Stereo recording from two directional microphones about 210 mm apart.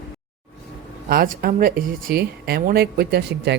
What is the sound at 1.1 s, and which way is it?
Speech, 40° right (ahead or behind).